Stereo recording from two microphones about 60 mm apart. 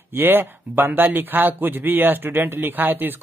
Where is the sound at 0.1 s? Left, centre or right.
Right.